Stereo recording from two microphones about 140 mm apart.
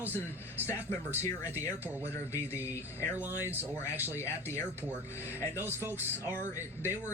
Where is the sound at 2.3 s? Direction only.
15° right (ahead or behind).